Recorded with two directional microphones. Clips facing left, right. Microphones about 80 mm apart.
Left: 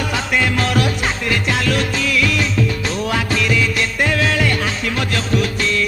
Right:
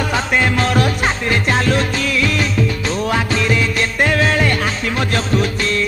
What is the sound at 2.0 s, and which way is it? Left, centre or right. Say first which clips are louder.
Music of bollywood: even; right.